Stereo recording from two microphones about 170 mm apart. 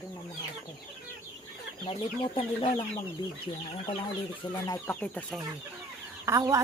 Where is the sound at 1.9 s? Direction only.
30° left (ahead or behind).